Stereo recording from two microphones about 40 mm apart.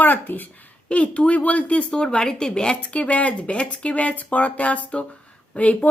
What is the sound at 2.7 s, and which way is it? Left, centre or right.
Speech, left.